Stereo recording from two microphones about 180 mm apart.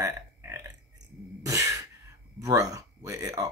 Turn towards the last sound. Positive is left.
turn(degrees=-20)  # may be behind; listen again after turning